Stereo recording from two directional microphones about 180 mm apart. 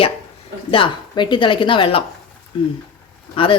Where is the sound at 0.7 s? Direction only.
30° left (ahead or behind).